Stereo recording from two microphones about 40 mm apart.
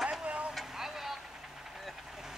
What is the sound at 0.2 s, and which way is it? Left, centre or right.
Vehicle, right.